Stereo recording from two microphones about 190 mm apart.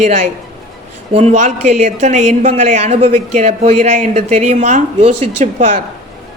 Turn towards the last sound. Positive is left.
turn(degrees=-40)  # may be behind; listen again after turning